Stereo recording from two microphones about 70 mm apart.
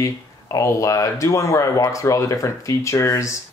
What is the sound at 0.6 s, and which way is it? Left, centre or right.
Speech, left.